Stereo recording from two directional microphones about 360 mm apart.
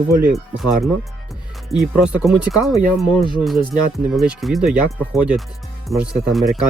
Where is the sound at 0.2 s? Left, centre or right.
Centre.